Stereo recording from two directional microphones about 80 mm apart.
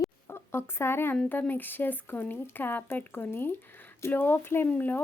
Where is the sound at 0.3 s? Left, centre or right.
Left.